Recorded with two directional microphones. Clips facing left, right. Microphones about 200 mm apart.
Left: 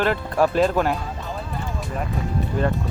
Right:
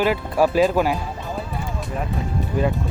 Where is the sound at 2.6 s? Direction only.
10° right (ahead or behind).